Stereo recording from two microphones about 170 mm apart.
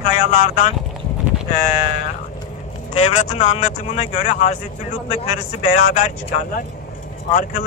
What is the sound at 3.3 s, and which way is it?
Speech, 40° left (ahead or behind).